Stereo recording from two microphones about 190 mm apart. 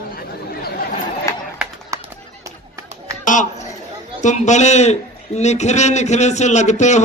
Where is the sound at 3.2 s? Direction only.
40° left (ahead or behind).